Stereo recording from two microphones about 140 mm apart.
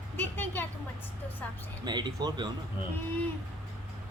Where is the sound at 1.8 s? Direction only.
30° right (ahead or behind).